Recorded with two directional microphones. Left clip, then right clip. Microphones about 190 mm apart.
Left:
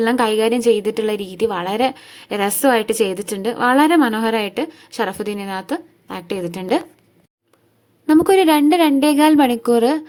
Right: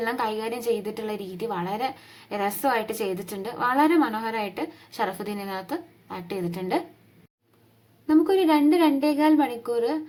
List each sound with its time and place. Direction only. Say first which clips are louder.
0.0 s a woman's voice: left 11 dB; 40° left (ahead or behind)
8.0 s a woman's voice: left 8 dB; 45° left (ahead or behind)